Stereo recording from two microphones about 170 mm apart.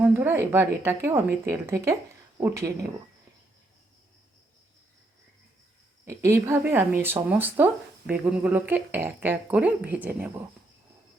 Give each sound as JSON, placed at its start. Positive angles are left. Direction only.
{"t": 0.0, "sound": "speech", "side_deg": -10}
{"t": 6.1, "sound": "speech", "side_deg": -15}